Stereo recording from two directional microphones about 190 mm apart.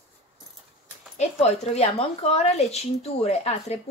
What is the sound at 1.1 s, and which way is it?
Speech, 35° left (ahead or behind).